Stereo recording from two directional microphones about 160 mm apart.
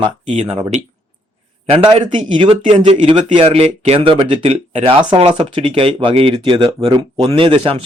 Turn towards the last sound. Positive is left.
turn(degrees=-35)  # may be behind; listen again after turning